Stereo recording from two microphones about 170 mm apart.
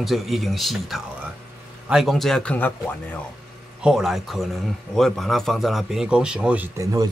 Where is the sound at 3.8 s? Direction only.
Centre (ahead or behind).